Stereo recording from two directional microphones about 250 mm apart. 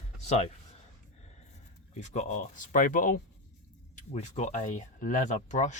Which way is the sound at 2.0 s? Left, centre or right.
Left.